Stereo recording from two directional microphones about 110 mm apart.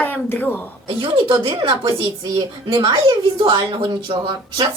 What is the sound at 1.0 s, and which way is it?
A woman's voice, 50° right (ahead or behind).